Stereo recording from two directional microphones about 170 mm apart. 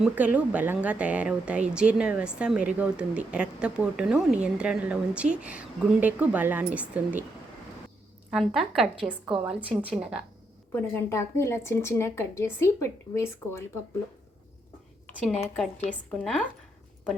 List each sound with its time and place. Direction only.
0.0 s a woman's voice: 10° right (ahead or behind)
8.3 s a woman's voice: centre (ahead or behind)
10.7 s speech: 15° left (ahead or behind)
15.9 s speech: 5° left (ahead or behind)